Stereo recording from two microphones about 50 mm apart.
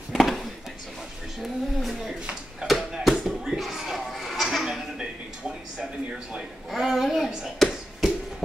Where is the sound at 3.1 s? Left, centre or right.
Centre.